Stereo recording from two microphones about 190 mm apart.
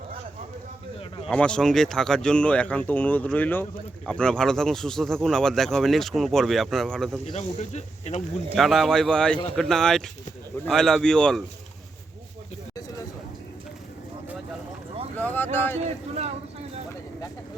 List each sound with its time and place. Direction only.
0.9 s a sound: 30° left (ahead or behind)
1.3 s speech: 5° left (ahead or behind)
7.3 s speech: 35° left (ahead or behind)
8.5 s speech: centre (ahead or behind)
15.5 s speech: 10° left (ahead or behind)
15.8 s speech: 35° right (ahead or behind)